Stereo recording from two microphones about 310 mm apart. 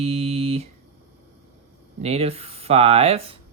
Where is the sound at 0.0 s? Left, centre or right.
Centre.